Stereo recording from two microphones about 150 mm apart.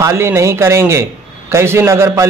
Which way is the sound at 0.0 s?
20° right (ahead or behind).